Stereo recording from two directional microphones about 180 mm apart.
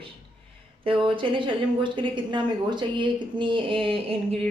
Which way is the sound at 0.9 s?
30° right (ahead or behind).